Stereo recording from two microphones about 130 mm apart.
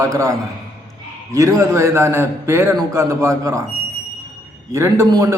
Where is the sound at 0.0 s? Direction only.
20° right (ahead or behind).